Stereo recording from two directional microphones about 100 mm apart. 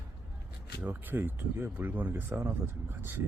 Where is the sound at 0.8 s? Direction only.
20° right (ahead or behind).